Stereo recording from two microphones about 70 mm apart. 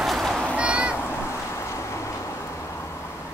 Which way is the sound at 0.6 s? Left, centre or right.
Centre.